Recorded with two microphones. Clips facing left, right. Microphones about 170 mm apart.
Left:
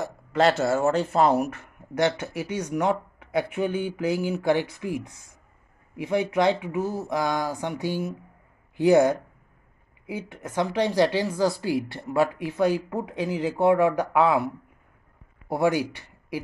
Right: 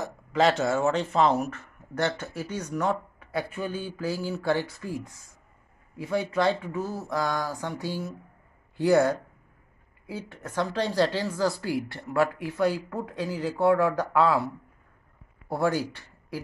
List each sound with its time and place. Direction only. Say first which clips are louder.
0.0 s speech: left 2 dB; centre (ahead or behind)